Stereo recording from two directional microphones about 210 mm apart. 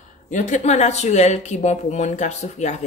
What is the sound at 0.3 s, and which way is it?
Speech, 35° left (ahead or behind).